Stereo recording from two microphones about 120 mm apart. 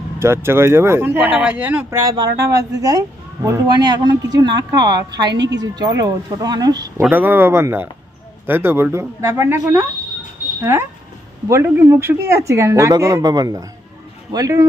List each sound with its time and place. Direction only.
0.2 s speech: 20° right (ahead or behind)
1.9 s speech: 30° right (ahead or behind)
3.7 s a woman's voice: 35° right (ahead or behind)
7.0 s speech: 15° right (ahead or behind)